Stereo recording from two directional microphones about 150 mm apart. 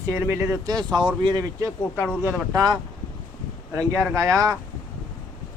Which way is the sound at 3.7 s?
10° left (ahead or behind).